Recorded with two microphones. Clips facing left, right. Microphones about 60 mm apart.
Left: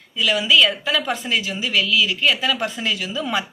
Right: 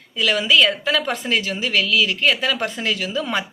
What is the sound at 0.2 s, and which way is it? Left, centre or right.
A woman's voice, right.